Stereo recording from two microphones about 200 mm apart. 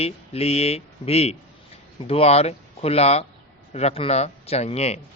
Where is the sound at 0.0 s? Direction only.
30° left (ahead or behind).